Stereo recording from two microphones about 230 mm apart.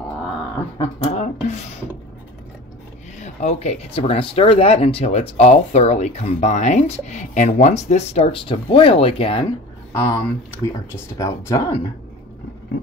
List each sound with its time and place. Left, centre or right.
0.7 s speech: left
3.2 s speech: left
9.9 s speech: centre